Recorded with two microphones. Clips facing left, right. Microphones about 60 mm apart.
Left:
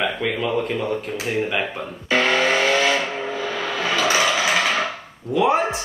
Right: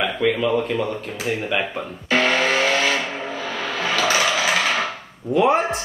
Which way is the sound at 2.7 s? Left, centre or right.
Left.